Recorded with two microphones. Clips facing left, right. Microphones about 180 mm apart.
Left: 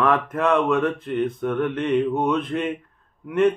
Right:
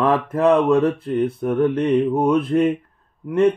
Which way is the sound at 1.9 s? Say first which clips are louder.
Right 4 dB; 30° right (ahead or behind).